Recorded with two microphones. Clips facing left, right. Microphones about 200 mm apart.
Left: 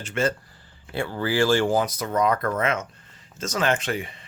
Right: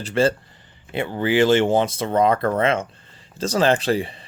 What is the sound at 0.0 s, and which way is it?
Speech, 30° right (ahead or behind).